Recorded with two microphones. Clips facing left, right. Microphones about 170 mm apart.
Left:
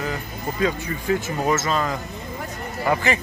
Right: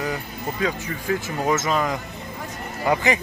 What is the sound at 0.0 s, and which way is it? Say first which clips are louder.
Speech: even; 10° right (ahead or behind).